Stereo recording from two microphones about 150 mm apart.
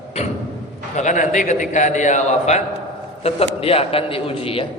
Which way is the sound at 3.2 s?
40° left (ahead or behind).